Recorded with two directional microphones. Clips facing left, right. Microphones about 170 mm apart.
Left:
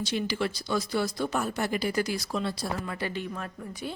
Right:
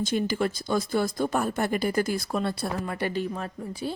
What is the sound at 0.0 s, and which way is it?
Speech, 50° right (ahead or behind).